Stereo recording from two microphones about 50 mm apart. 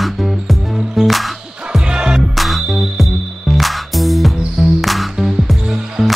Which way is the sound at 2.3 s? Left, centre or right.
Centre.